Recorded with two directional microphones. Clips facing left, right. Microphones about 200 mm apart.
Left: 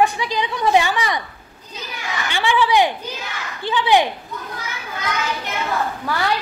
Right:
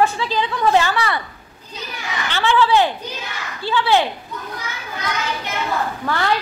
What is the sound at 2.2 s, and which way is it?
A woman's voice, 15° left (ahead or behind).